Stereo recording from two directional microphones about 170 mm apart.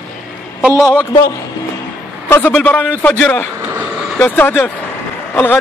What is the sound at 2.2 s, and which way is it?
Speech, 10° left (ahead or behind).